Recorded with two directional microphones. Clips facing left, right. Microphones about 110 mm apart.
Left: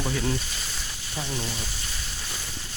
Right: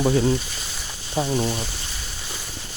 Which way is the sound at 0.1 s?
30° right (ahead or behind).